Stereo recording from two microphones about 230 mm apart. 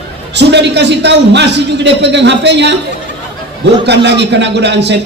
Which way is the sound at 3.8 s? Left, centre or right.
Right.